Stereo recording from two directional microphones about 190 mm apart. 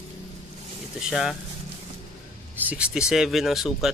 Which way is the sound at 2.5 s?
10° right (ahead or behind).